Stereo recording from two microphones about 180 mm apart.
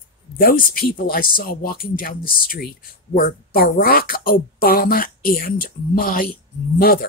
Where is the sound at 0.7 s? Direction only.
55° left (ahead or behind).